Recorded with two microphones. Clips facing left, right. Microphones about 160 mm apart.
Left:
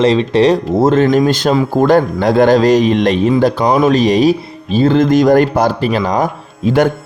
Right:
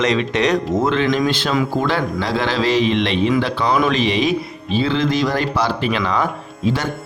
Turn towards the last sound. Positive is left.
turn(degrees=50)  # may be behind; listen again after turning